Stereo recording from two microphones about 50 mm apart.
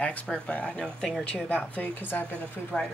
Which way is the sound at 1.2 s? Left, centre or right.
Left.